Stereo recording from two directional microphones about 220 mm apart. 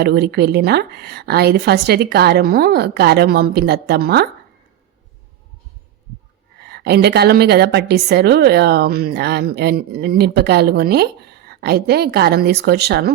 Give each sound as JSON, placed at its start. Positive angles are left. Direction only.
{"t": 0.0, "sound": "a woman's voice", "side_deg": -50}
{"t": 6.6, "sound": "a woman's voice", "side_deg": -45}